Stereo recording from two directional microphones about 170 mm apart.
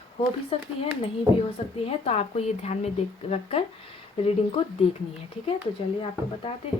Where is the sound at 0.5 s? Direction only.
35° left (ahead or behind).